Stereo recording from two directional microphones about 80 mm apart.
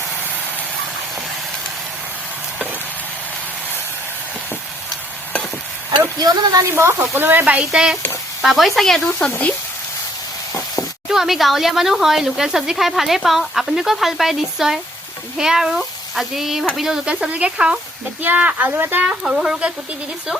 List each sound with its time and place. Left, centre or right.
6.1 s speech: right
6.7 s speech: right; by 9.0 s centre
11.1 s speech: centre; by 19.0 s right
19.0 s speech: centre